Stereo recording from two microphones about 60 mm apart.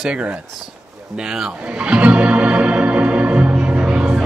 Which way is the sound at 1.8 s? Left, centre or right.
Right.